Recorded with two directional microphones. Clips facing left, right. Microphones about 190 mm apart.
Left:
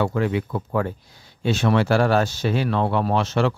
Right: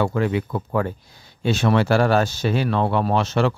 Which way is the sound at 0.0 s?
40° right (ahead or behind).